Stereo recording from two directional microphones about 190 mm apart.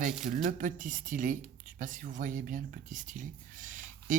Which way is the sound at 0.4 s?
45° right (ahead or behind).